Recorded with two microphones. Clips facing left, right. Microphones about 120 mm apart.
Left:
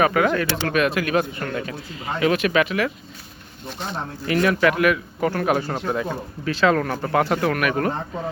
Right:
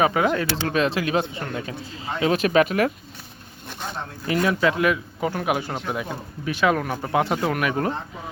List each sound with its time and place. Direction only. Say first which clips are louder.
0.0 s speech: left 1 dB; 20° right (ahead or behind); by 2.9 s 45° right (ahead or behind)
4.3 s speech: left 2 dB; 25° right (ahead or behind)